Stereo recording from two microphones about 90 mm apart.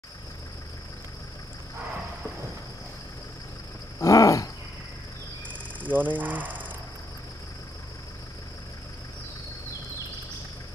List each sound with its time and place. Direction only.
4.0 s wild animals: 35° left (ahead or behind)
5.9 s speech: 20° right (ahead or behind)